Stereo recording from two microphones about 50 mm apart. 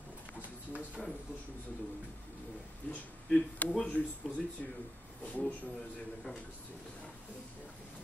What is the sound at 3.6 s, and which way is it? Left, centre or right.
Speech, left.